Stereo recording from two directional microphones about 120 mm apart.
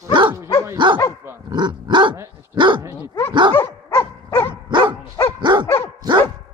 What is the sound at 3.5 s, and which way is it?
Dog, 20° left (ahead or behind).